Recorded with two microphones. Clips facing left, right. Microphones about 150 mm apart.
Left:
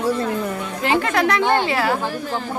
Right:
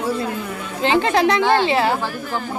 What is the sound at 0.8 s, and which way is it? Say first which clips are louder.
Speech: right 3 dB; 25° right (ahead or behind).